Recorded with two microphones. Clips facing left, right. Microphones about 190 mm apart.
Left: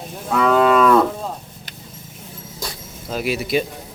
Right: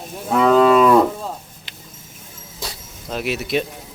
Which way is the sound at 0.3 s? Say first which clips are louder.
Right 2 dB; 25° right (ahead or behind).